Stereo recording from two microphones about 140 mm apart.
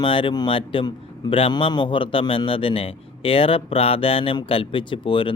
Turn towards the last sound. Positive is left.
turn(degrees=35)  # may be behind; listen again after turning